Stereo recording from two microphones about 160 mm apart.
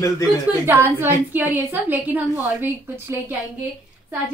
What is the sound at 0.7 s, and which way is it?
A woman's voice, 15° right (ahead or behind).